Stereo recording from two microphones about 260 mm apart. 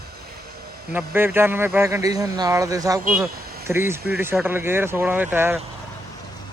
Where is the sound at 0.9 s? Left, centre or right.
Centre.